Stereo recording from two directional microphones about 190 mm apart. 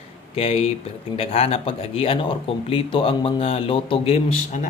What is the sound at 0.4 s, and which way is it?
Speech, 30° left (ahead or behind).